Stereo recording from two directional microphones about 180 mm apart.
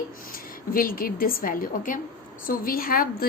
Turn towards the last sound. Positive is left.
turn(degrees=55)  # may be behind; listen again after turning